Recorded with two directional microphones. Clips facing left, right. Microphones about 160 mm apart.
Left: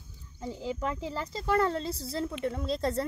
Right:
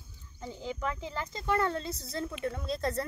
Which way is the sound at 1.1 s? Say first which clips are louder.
Left 3 dB; 35° left (ahead or behind).